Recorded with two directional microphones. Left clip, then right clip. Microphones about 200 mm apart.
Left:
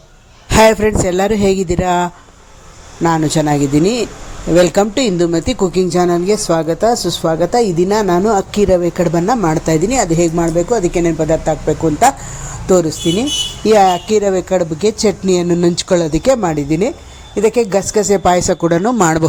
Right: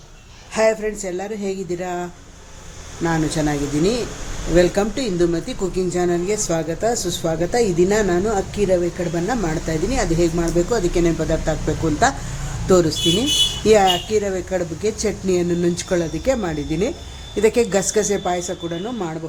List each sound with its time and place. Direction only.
0.5 s speech: 40° left (ahead or behind); by 11.5 s 20° left (ahead or behind)
12.6 s a woman's voice: 20° left (ahead or behind)
18.2 s a man's voice: 40° left (ahead or behind); by 19.2 s 55° left (ahead or behind)